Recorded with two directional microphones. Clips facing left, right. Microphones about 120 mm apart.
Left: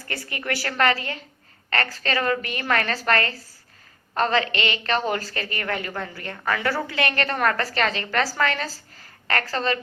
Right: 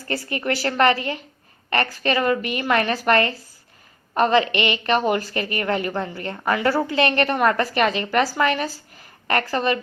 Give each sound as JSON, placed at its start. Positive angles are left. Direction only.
{"t": 0.1, "sound": "a woman's voice", "side_deg": -30}